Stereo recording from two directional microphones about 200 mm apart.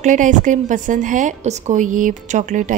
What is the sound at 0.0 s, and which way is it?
A woman's voice, 40° right (ahead or behind).